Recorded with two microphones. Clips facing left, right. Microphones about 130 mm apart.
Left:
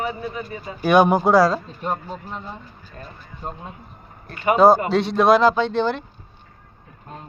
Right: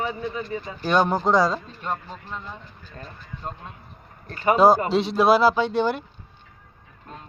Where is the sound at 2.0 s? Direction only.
40° left (ahead or behind).